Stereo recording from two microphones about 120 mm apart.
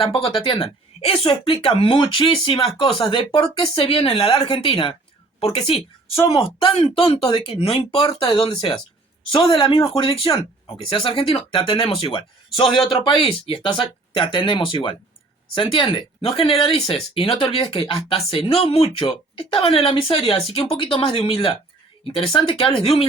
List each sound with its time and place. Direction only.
0.0 s speech: 50° left (ahead or behind)